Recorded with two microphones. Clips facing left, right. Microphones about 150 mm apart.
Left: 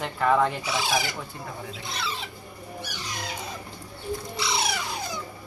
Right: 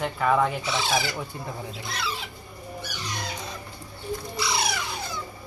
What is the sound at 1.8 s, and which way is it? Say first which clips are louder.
Speech: right 1 dB; centre (ahead or behind).